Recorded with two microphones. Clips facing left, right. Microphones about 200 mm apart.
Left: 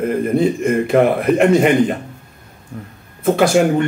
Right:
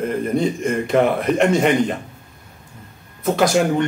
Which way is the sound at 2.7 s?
65° left (ahead or behind).